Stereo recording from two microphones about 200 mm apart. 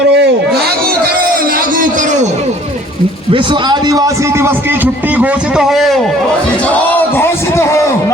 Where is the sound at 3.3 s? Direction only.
25° right (ahead or behind).